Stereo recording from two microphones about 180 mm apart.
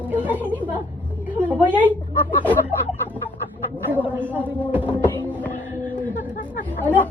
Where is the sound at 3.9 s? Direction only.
10° right (ahead or behind).